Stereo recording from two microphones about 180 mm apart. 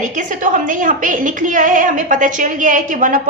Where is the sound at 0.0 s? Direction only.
45° right (ahead or behind).